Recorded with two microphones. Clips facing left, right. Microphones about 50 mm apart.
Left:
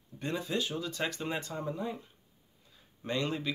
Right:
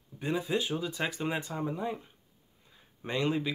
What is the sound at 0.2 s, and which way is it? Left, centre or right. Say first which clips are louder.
Speech: right 3 dB; centre.